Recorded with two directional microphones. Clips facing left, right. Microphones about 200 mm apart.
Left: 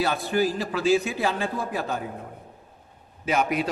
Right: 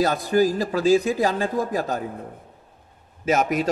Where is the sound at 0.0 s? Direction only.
40° right (ahead or behind).